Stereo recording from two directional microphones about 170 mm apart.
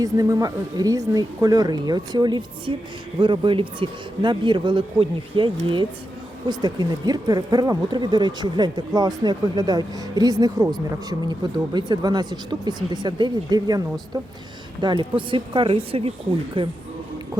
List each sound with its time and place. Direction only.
0.0 s speech: 20° right (ahead or behind)